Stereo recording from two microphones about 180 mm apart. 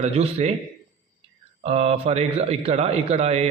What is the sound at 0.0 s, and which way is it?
Speech, 35° right (ahead or behind).